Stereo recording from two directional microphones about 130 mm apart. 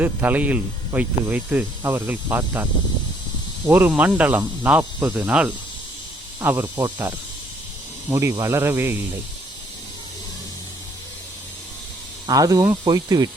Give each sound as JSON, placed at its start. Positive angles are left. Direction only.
{"t": 0.0, "sound": "speech", "side_deg": -15}
{"t": 3.7, "sound": "speech", "side_deg": -15}
{"t": 8.1, "sound": "speech", "side_deg": -20}
{"t": 12.2, "sound": "speech", "side_deg": -30}